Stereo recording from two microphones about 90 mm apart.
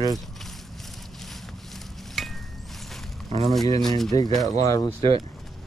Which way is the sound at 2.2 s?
Centre (ahead or behind).